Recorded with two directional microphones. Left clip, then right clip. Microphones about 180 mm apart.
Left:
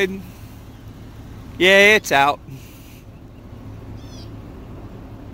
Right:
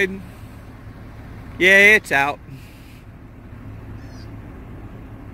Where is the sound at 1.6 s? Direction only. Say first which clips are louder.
Even; 20° left (ahead or behind).